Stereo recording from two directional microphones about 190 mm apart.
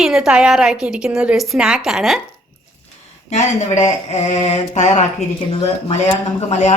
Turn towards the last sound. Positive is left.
turn(degrees=35)  # may be behind; listen again after turning